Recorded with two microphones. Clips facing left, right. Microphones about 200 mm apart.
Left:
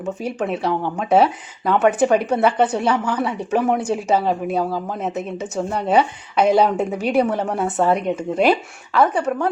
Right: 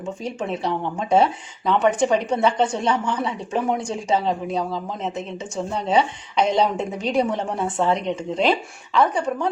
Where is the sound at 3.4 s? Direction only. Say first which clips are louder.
Left 4 dB; 65° left (ahead or behind).